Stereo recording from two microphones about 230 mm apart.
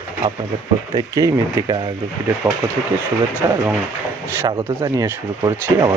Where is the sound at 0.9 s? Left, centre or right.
Centre.